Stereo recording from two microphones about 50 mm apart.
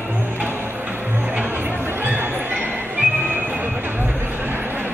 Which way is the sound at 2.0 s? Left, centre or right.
Right.